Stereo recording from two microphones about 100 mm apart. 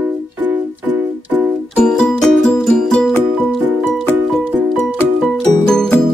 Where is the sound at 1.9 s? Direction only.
5° left (ahead or behind).